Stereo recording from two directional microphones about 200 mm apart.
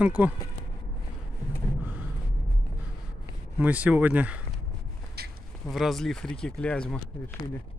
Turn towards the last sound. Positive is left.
turn(degrees=5)  # may be behind; listen again after turning